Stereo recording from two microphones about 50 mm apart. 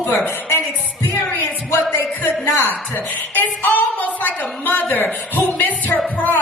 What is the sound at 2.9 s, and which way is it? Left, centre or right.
A woman's voice, left.